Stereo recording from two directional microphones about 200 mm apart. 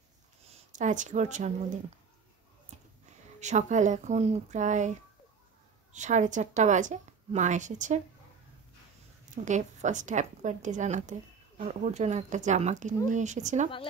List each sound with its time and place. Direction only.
0.5 s speech: 35° right (ahead or behind)
3.3 s a woman's voice: 35° right (ahead or behind)
5.9 s a woman's voice: 35° right (ahead or behind)
9.3 s a woman's voice: 35° right (ahead or behind)